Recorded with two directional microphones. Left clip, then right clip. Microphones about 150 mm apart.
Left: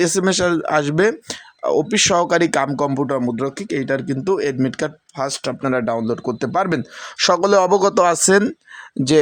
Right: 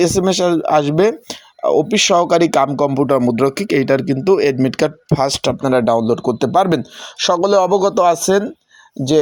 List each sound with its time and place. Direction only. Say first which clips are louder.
0.0 s speech: right 3 dB; 5° right (ahead or behind)
3.1 s speech: right 6 dB; 25° right (ahead or behind)
3.3 s speech: right 7 dB; 40° right (ahead or behind); by 7.1 s 5° right (ahead or behind)
7.3 s speech: right 1 dB; 10° left (ahead or behind)